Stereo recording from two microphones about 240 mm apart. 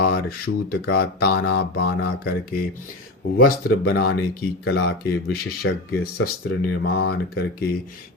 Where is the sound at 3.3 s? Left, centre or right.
Left.